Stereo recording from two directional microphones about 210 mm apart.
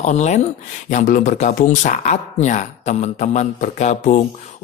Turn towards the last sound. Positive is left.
turn(degrees=35)  # may be behind; listen again after turning